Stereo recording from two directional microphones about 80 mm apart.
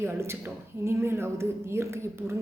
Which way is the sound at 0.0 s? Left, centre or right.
Right.